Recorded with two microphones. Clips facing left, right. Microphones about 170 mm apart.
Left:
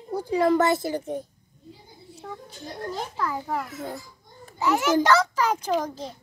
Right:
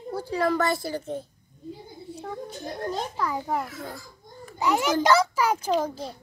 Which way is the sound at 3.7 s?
20° left (ahead or behind).